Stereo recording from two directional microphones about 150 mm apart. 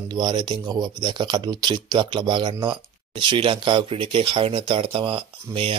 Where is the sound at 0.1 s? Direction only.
30° right (ahead or behind).